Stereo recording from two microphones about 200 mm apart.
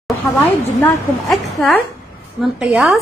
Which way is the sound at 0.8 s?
Centre (ahead or behind).